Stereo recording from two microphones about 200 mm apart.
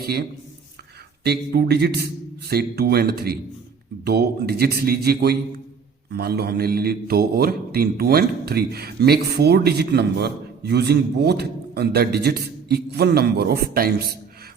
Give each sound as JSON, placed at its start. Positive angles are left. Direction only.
{"t": 0.0, "sound": "a man's voice", "side_deg": -50}